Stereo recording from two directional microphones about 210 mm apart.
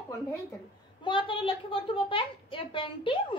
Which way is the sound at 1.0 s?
25° left (ahead or behind).